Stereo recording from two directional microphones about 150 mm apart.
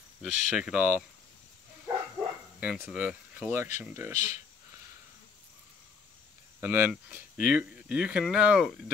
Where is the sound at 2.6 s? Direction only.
5° right (ahead or behind).